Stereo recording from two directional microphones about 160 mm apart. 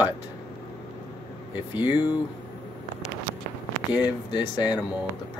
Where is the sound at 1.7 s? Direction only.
10° right (ahead or behind).